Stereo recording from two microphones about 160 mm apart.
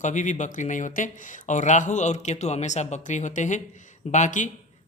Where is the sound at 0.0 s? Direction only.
50° left (ahead or behind).